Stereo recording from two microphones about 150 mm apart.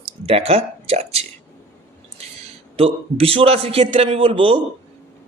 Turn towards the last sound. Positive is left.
turn(degrees=-35)  # may be behind; listen again after turning